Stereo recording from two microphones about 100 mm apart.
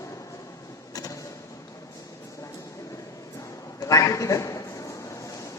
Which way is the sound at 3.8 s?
35° left (ahead or behind).